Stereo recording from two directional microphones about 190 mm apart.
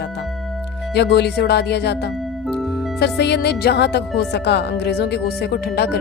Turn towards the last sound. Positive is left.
turn(degrees=55)  # may be behind; listen again after turning